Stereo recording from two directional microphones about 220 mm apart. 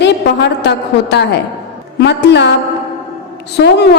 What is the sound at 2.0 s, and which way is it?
Speech, 50° left (ahead or behind).